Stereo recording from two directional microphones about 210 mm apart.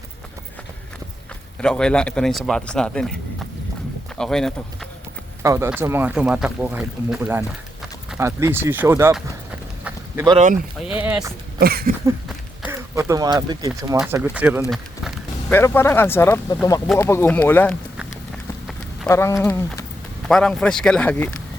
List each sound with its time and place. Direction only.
1.6 s speech: 5° left (ahead or behind)
4.2 s speech: centre (ahead or behind)
5.4 s speech: 15° right (ahead or behind)
10.8 s speech: 10° right (ahead or behind)
11.6 s a sound: 45° right (ahead or behind)
12.6 s speech: 10° right (ahead or behind)
14.0 s speech: 10° right (ahead or behind)
14.7 s speech: 5° left (ahead or behind)
19.0 s speech: 15° left (ahead or behind)